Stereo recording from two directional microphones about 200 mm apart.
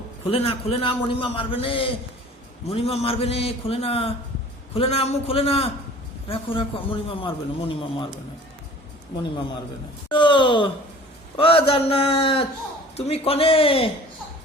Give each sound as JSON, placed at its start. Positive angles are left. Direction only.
{"t": 0.3, "sound": "a man's voice", "side_deg": 30}
{"t": 10.1, "sound": "a man's voice", "side_deg": 25}